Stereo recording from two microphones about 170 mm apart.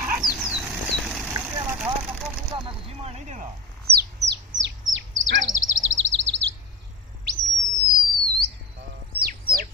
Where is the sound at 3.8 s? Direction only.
75° right (ahead or behind).